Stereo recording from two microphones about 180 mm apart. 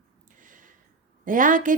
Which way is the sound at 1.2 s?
50° right (ahead or behind).